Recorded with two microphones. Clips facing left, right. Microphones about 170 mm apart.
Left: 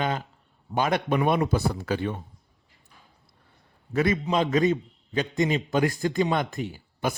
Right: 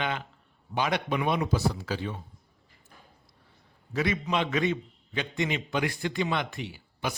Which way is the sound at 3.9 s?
50° left (ahead or behind).